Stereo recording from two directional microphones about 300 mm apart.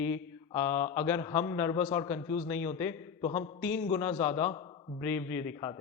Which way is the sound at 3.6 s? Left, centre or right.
Centre.